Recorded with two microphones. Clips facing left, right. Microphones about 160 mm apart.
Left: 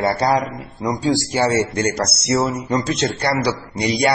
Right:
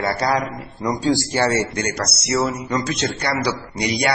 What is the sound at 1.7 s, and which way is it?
A man's voice, 25° left (ahead or behind).